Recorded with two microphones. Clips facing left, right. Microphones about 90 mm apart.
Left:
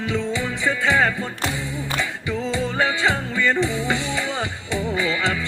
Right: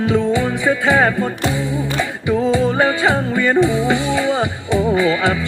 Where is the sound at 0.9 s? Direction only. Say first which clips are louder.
Right 5 dB; 40° right (ahead or behind).